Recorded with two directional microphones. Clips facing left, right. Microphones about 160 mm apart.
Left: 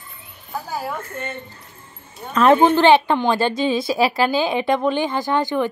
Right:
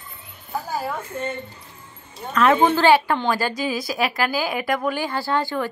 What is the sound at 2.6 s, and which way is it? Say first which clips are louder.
A woman's voice: left 3 dB; 20° left (ahead or behind).